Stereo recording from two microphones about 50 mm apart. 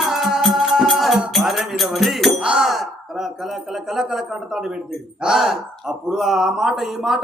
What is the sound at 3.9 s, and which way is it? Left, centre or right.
Speech, centre.